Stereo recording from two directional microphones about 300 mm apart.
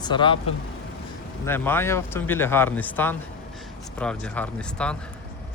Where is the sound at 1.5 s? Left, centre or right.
Centre.